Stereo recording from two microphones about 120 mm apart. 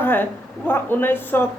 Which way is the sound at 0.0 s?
15° left (ahead or behind).